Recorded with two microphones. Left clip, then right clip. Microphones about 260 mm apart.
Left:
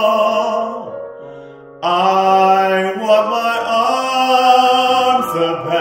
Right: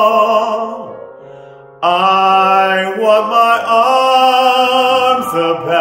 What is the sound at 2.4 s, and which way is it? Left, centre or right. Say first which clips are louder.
Chant: right 1 dB; centre.